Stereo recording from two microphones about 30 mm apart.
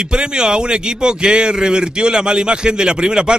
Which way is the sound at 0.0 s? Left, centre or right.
Right.